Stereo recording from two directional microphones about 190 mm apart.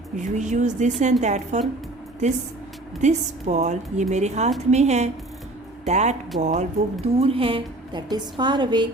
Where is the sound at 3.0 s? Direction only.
40° right (ahead or behind).